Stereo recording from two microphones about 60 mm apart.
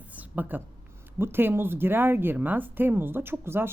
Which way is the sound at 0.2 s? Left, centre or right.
Right.